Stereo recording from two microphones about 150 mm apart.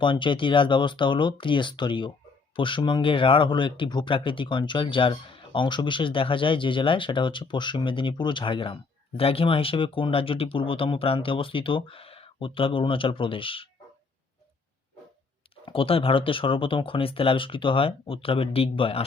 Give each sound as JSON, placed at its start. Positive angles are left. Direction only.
{"t": 0.0, "sound": "speech", "side_deg": 35}
{"t": 15.6, "sound": "speech", "side_deg": 35}